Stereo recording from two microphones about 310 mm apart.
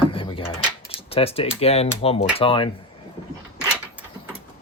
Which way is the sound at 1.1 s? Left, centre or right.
Centre.